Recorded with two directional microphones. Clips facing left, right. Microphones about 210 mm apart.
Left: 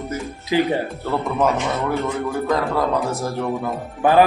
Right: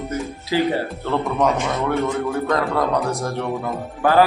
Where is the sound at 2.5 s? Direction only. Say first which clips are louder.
Left 1 dB; centre (ahead or behind).